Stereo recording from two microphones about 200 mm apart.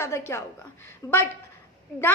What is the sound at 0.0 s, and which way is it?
A woman's voice, 10° left (ahead or behind).